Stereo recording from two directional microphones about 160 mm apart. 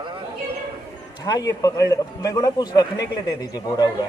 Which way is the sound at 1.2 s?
25° left (ahead or behind).